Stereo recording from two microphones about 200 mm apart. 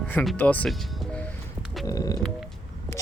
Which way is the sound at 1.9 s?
15° left (ahead or behind).